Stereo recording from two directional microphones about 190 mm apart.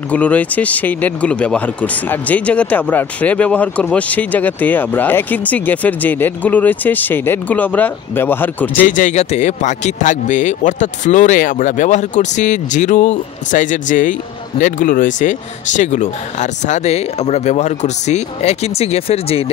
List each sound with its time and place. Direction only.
0.1 s speech: 5° left (ahead or behind)
8.7 s speech: 45° left (ahead or behind)